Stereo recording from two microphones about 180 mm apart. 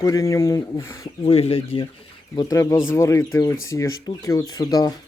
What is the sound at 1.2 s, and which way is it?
Speech, 35° left (ahead or behind).